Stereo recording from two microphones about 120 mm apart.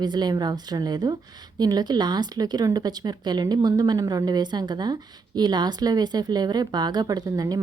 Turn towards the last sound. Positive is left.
turn(degrees=-30)  # may be behind; listen again after turning